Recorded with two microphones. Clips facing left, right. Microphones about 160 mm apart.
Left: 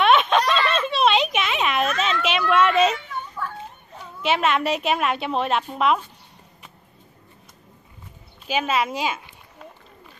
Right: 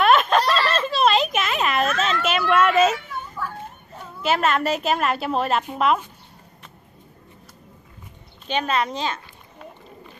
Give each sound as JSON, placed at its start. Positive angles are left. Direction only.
{"t": 0.0, "sound": "a sound", "side_deg": 0}
{"t": 3.9, "sound": "a woman's voice", "side_deg": 0}
{"t": 8.5, "sound": "a woman's voice", "side_deg": 5}